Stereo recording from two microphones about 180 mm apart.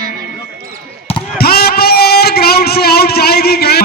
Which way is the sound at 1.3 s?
60° left (ahead or behind).